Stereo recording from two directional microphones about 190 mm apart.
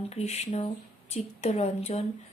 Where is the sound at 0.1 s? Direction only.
35° left (ahead or behind).